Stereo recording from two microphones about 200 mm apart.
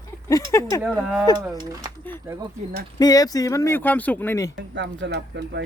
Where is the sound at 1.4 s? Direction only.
15° right (ahead or behind).